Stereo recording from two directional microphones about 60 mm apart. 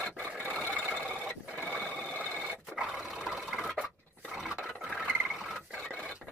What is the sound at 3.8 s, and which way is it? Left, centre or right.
Filing, right.